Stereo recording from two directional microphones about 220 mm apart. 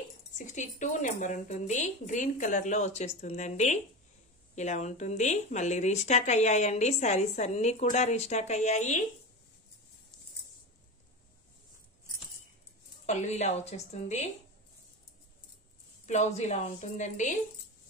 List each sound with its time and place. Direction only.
0.4 s speech: 35° left (ahead or behind)
13.0 s speech: 30° left (ahead or behind)
16.1 s speech: 30° left (ahead or behind)